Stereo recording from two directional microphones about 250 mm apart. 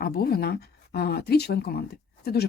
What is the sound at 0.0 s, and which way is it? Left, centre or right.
Speech, left.